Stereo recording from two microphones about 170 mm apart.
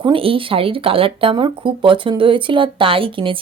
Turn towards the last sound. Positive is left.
turn(degrees=-30)  # may be behind; listen again after turning